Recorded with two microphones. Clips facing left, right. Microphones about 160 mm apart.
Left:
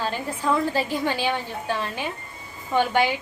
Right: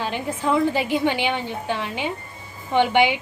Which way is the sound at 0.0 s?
20° right (ahead or behind).